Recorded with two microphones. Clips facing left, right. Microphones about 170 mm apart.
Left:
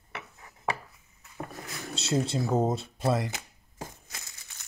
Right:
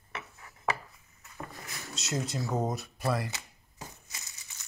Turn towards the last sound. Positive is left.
turn(degrees=55)  # may be behind; listen again after turning